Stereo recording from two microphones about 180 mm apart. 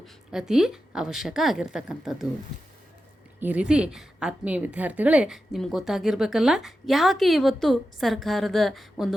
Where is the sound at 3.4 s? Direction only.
5° right (ahead or behind).